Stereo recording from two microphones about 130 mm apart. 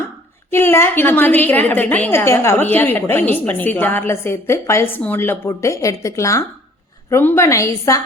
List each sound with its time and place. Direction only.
0.5 s a woman's voice: 15° left (ahead or behind)